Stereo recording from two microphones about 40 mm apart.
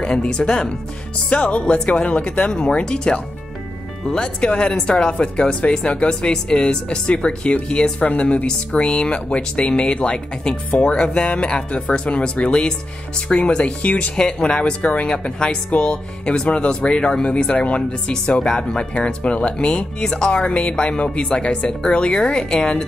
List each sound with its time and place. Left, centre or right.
0.0 s speech: centre
18.1 s speech: left
19.7 s speech: centre
20.4 s speech: left